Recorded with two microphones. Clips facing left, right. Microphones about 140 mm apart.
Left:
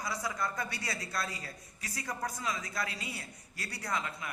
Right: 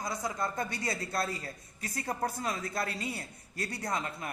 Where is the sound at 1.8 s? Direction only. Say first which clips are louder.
Right 4 dB; 50° right (ahead or behind).